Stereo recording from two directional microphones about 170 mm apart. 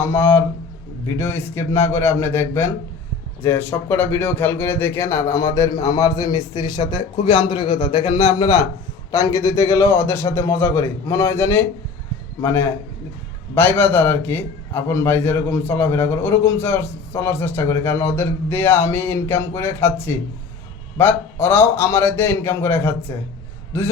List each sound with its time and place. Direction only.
0.0 s a man's voice: 15° left (ahead or behind); by 8.4 s 40° left (ahead or behind)
9.1 s a man's voice: 20° left (ahead or behind)